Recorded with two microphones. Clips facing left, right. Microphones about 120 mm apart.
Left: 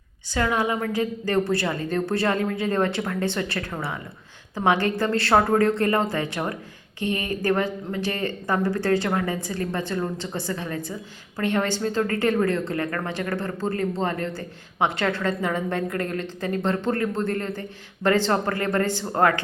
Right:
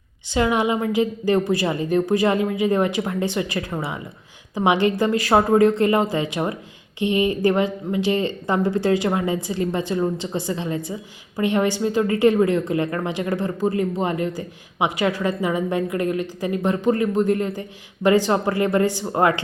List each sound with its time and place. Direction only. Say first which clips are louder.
0.3 s speech: right 4 dB; 20° right (ahead or behind)